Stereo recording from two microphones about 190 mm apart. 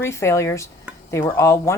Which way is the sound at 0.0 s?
15° left (ahead or behind).